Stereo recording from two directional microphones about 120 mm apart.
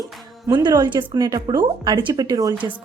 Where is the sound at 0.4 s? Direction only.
35° right (ahead or behind).